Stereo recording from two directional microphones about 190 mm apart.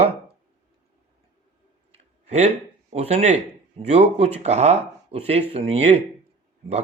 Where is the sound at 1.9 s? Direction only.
35° right (ahead or behind).